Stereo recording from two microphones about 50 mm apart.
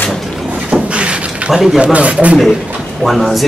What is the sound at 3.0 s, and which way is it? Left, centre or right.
Speech, centre.